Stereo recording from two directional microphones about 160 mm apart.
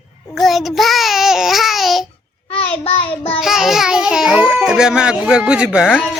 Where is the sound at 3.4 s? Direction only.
5° right (ahead or behind).